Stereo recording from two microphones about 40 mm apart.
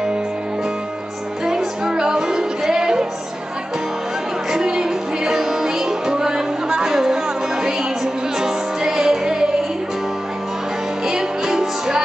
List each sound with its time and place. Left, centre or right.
1.9 s music: centre
4.5 s music: centre
11.1 s music: centre